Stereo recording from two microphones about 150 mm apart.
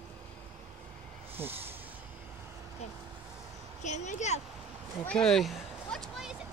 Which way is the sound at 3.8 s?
55° left (ahead or behind).